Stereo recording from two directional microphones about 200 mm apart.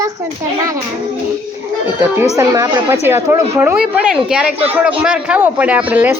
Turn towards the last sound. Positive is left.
turn(degrees=-5)  # may be behind; listen again after turning